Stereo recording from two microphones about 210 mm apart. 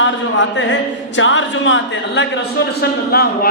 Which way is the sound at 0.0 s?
60° left (ahead or behind).